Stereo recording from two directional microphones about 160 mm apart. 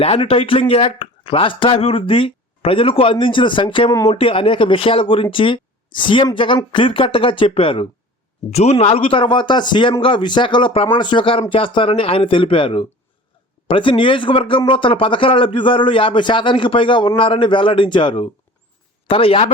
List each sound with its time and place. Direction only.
0.0 s speech: 35° left (ahead or behind)
4.2 s a man's voice: 35° left (ahead or behind)